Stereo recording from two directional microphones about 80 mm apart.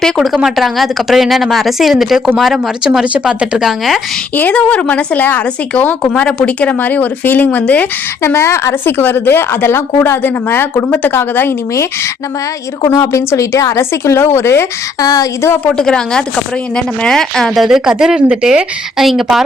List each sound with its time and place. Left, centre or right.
0.0 s speech: centre
4.5 s a woman's voice: centre
8.2 s a woman's voice: left
12.8 s a woman's voice: left
15.0 s speech: left
15.8 s speech: centre